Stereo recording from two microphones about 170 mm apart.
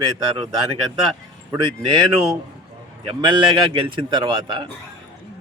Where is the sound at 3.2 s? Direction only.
30° right (ahead or behind).